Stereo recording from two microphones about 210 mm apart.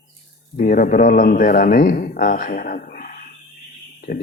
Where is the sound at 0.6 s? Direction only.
40° left (ahead or behind).